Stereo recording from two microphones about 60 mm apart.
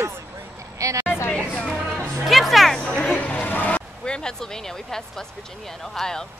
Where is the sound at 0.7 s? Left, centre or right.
Right.